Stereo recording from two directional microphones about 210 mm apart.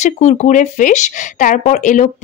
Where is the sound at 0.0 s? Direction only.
35° left (ahead or behind).